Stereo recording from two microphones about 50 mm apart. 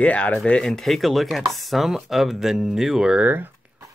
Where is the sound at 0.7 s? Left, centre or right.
Centre.